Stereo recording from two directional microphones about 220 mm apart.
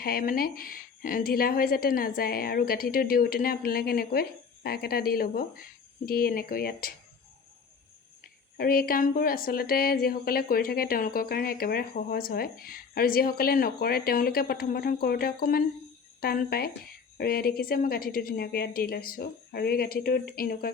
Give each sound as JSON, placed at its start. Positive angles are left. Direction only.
{"t": 0.0, "sound": "a woman's voice", "side_deg": 40}
{"t": 8.5, "sound": "a woman's voice", "side_deg": 40}